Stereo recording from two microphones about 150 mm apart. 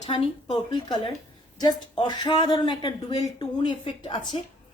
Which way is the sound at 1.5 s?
30° left (ahead or behind).